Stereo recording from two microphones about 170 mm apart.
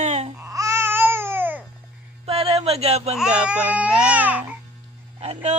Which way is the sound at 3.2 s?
5° right (ahead or behind).